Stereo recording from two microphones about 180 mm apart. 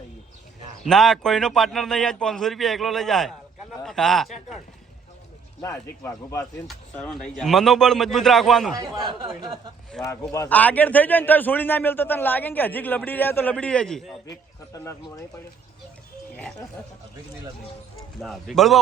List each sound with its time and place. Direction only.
0.9 s a man's voice: centre (ahead or behind)
5.6 s a man's voice: 5° left (ahead or behind)
8.7 s speech: 25° right (ahead or behind)
10.3 s a man's voice: 10° left (ahead or behind)
14.3 s speech: 20° left (ahead or behind)
18.2 s a man's voice: centre (ahead or behind)